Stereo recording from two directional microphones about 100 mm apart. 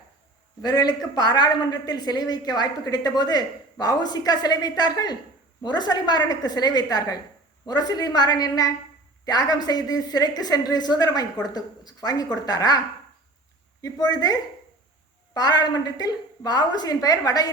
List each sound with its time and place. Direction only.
0.6 s a woman's voice: 40° left (ahead or behind)
13.8 s a woman's voice: 40° left (ahead or behind)